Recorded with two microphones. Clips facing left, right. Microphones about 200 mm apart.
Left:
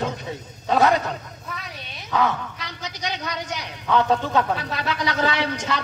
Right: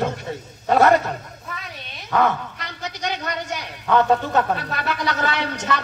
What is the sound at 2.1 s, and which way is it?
Speech, 55° right (ahead or behind).